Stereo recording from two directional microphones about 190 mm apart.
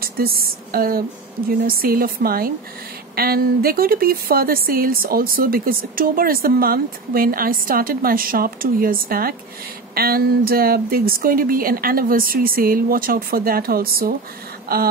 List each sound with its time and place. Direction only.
0.0 s speech: 50° right (ahead or behind)